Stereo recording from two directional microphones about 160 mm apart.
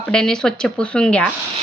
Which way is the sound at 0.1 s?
5° left (ahead or behind).